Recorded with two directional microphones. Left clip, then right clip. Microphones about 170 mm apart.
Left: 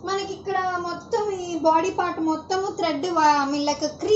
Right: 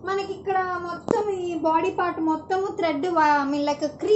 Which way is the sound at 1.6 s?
10° right (ahead or behind).